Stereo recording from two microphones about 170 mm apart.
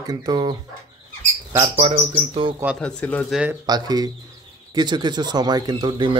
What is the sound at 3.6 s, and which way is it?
A man's voice, 25° right (ahead or behind).